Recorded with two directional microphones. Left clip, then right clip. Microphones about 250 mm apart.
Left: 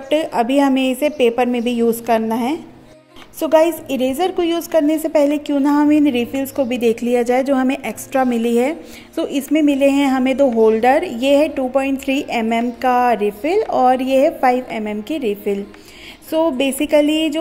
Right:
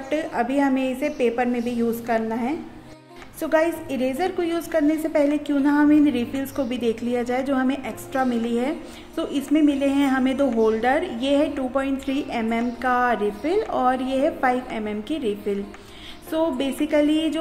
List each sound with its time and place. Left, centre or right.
0.1 s a woman's voice: left